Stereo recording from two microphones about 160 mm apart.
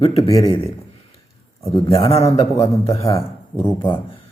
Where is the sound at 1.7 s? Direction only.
35° left (ahead or behind).